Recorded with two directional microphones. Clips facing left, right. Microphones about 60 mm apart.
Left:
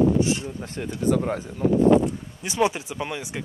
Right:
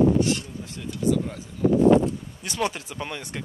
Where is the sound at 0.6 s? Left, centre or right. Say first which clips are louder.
Even; left.